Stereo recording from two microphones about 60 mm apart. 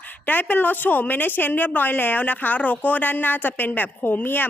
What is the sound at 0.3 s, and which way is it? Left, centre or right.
A woman's voice, left.